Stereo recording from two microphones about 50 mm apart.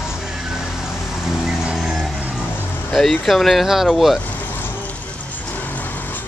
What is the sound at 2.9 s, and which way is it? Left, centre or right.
Speech, centre.